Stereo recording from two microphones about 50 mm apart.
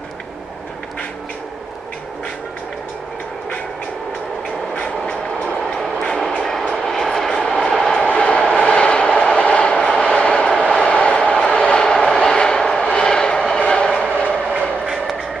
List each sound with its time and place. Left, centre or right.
4.7 s train: left
5.6 s train: centre
8.0 s train: left
10.6 s vehicle: left
13.6 s train: left